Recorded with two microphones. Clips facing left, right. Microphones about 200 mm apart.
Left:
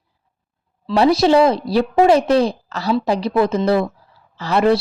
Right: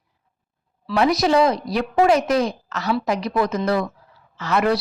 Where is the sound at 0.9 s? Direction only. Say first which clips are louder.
Left 4 dB; 30° left (ahead or behind).